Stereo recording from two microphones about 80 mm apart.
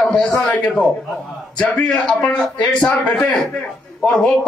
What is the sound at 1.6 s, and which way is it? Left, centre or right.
A man's voice, centre.